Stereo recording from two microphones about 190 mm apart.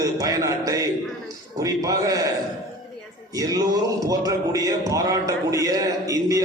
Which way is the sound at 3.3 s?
20° right (ahead or behind).